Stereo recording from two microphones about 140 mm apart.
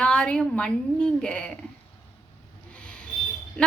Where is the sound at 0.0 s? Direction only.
5° left (ahead or behind).